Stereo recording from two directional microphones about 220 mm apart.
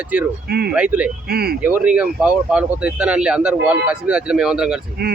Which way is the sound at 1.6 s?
5° right (ahead or behind).